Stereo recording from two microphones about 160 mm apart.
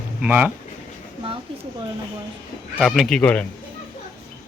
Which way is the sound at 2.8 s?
Centre (ahead or behind).